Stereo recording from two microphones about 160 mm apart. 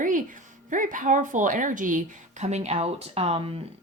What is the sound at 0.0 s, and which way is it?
Speech, 55° right (ahead or behind).